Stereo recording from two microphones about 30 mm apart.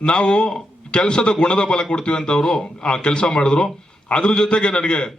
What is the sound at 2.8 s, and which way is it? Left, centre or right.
A man's voice, left.